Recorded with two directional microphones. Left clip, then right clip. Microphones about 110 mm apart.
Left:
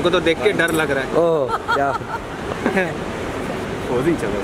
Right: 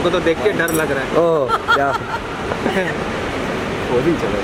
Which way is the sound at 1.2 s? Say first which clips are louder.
Right 3 dB; centre (ahead or behind).